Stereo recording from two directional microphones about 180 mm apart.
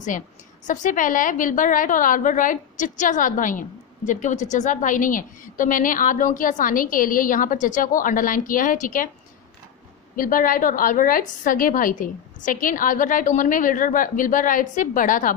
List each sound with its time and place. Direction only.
0.7 s a woman's voice: 45° left (ahead or behind)
10.1 s a woman's voice: 50° left (ahead or behind)